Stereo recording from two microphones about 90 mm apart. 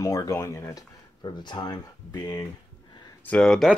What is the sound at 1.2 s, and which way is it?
Speech, 55° left (ahead or behind).